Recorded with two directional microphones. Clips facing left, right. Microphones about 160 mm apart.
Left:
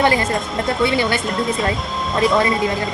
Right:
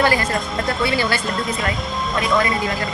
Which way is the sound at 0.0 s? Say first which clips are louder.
Left 2 dB; 25° left (ahead or behind).